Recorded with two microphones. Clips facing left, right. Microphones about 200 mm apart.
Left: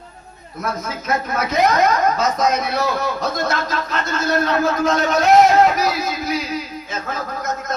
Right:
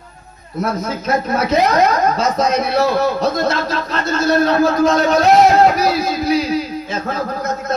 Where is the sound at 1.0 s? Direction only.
30° right (ahead or behind).